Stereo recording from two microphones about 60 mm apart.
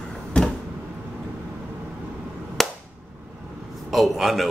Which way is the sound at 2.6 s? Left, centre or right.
Centre.